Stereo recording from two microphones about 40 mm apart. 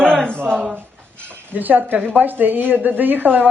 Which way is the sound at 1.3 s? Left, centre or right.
Right.